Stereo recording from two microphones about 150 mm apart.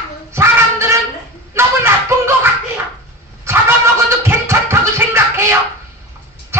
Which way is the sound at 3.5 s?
20° right (ahead or behind).